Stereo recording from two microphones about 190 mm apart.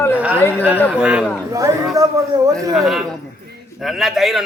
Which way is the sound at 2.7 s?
Centre (ahead or behind).